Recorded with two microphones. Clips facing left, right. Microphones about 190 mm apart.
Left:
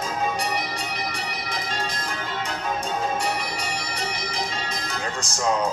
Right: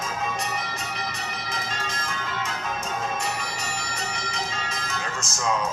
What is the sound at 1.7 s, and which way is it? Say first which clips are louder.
Change ringing: left 3 dB; 35° left (ahead or behind).